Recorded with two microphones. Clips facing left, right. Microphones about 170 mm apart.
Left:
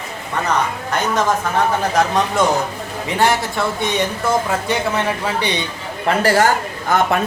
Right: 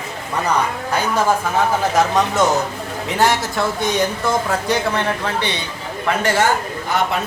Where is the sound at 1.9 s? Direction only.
Centre (ahead or behind).